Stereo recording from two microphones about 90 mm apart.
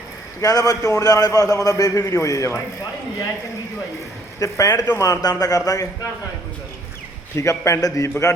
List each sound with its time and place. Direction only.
0.4 s a man's voice: 45° left (ahead or behind)
4.4 s a man's voice: 35° left (ahead or behind)
7.3 s a man's voice: 35° left (ahead or behind)